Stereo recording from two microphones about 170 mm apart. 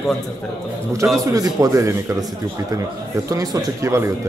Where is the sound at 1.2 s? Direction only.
20° right (ahead or behind).